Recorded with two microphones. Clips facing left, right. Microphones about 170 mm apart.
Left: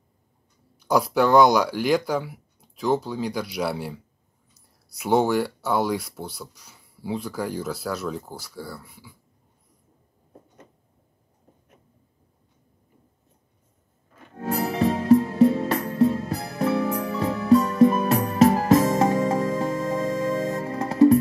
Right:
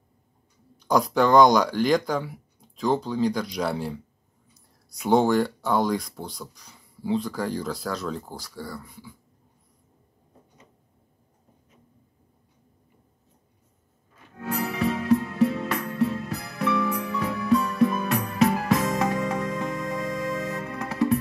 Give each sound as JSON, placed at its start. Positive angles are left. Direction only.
{"t": 0.7, "sound": "speech", "side_deg": 5}
{"t": 14.3, "sound": "music", "side_deg": 35}